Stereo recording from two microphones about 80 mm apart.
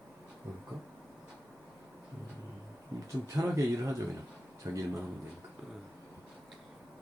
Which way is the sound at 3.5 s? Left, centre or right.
Right.